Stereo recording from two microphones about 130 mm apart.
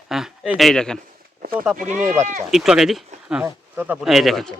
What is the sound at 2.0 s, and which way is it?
Speech, 20° right (ahead or behind).